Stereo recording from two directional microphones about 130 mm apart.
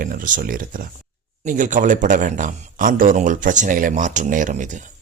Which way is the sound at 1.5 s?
80° right.